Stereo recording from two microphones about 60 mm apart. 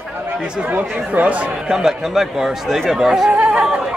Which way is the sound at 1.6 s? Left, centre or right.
Centre.